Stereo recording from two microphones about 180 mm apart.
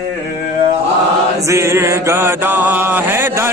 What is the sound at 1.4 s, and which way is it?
Mantra, 15° right (ahead or behind).